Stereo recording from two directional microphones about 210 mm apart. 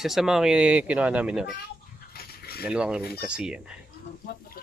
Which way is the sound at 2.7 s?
5° right (ahead or behind).